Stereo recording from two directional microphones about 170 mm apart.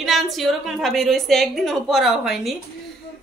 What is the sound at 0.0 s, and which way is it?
Speech, centre (ahead or behind).